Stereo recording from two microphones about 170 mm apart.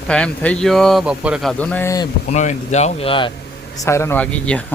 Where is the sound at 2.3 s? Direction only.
45° left (ahead or behind).